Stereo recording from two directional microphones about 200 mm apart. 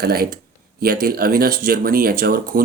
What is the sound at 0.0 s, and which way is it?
Speech, 50° right (ahead or behind).